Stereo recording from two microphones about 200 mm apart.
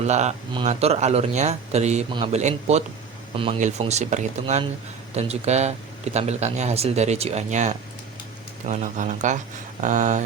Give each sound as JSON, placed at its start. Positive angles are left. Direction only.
{"t": 0.0, "sound": "speech", "side_deg": -35}